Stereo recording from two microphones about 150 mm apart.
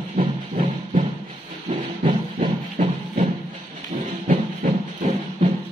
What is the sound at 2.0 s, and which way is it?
Music, 55° right (ahead or behind).